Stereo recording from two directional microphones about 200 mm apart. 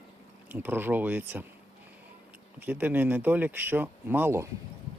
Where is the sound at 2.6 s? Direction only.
10° right (ahead or behind).